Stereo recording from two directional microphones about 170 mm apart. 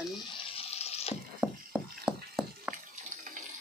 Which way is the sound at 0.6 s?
35° left (ahead or behind).